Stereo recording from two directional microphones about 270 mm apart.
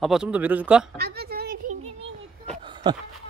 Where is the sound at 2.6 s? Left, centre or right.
Centre.